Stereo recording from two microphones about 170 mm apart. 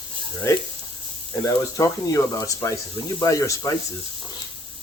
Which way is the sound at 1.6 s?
20° left (ahead or behind).